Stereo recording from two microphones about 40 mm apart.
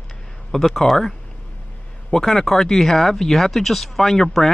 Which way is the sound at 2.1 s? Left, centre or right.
Centre.